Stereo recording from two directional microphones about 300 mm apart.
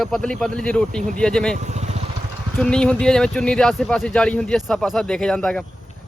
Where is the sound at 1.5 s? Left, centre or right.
Right.